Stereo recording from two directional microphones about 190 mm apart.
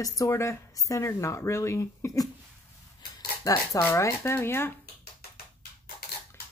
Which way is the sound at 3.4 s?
15° left (ahead or behind).